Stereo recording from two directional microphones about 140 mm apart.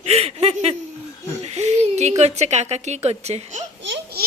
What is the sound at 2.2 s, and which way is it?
A woman's voice, 50° right (ahead or behind).